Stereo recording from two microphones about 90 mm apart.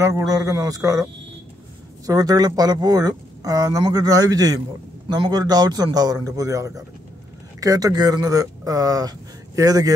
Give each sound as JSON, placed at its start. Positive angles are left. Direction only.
{"t": 0.0, "sound": "speech", "side_deg": -40}
{"t": 2.0, "sound": "a man's voice", "side_deg": -45}
{"t": 5.0, "sound": "a man's voice", "side_deg": -55}